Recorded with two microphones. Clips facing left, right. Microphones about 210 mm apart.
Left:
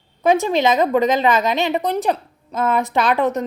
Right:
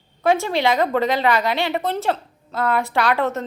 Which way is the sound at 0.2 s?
15° left (ahead or behind).